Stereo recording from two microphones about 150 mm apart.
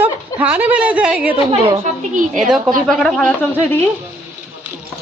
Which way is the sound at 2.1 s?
55° right (ahead or behind).